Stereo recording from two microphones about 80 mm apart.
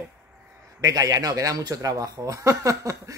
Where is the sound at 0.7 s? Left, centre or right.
Right.